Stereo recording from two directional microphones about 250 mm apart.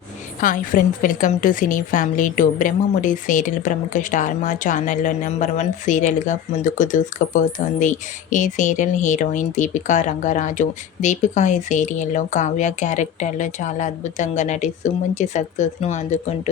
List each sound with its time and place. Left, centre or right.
0.3 s a woman's voice: left